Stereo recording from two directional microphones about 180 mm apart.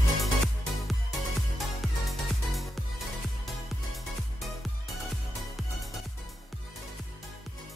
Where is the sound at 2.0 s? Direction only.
Centre (ahead or behind).